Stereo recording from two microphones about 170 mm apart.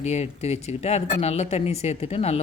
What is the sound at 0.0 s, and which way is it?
A woman's voice, 40° left (ahead or behind).